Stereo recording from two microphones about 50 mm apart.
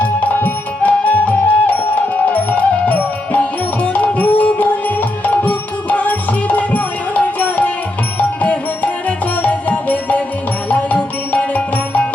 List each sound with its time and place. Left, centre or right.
0.0 s music: left